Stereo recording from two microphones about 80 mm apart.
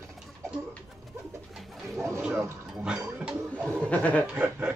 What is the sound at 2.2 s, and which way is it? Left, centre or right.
Speech, centre.